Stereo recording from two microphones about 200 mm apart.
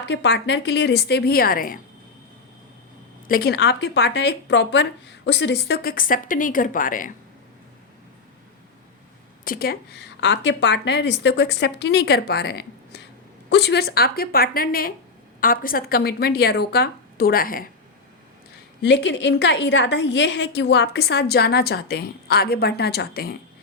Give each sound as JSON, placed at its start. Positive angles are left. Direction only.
{"t": 0.0, "sound": "a woman's voice", "side_deg": 60}
{"t": 3.2, "sound": "speech", "side_deg": 50}
{"t": 9.4, "sound": "a woman's voice", "side_deg": 45}
{"t": 18.8, "sound": "a woman's voice", "side_deg": 60}